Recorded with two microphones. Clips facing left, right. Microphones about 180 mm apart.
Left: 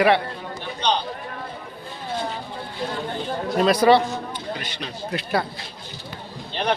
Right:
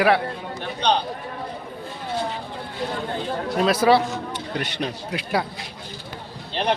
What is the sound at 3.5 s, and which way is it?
Speech, centre (ahead or behind).